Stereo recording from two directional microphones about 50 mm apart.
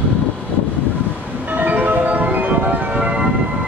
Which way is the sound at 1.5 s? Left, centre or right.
Right.